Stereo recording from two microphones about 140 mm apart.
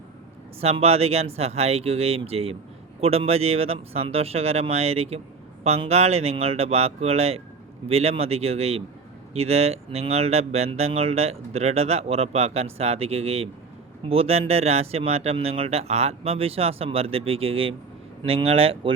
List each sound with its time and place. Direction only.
0.6 s speech: 45° right (ahead or behind)